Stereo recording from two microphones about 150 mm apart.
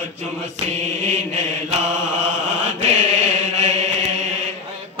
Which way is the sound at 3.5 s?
50° right (ahead or behind).